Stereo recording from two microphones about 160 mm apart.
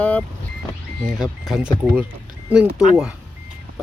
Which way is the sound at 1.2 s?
Centre (ahead or behind).